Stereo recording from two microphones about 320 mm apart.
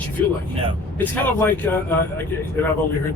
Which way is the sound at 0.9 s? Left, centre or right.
Centre.